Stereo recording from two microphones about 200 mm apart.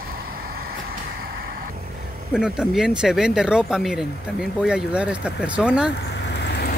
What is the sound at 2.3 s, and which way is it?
Speech, 5° right (ahead or behind).